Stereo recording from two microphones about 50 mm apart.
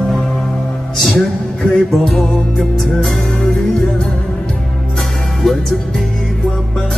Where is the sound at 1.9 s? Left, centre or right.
Centre.